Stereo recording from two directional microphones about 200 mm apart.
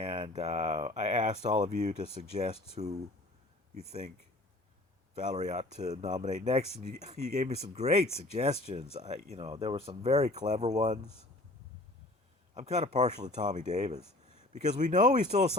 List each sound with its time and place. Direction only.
0.0 s speech: 25° right (ahead or behind)
5.1 s speech: 35° right (ahead or behind)
12.5 s speech: 35° right (ahead or behind)